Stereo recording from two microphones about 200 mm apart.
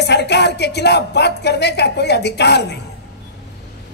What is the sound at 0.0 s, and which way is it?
Speech, 60° left (ahead or behind).